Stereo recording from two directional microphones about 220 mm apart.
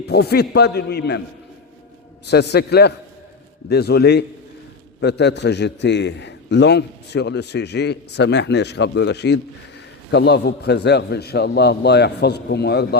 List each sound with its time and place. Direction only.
0.0 s a man's voice: 50° left (ahead or behind)
2.2 s a man's voice: 50° left (ahead or behind)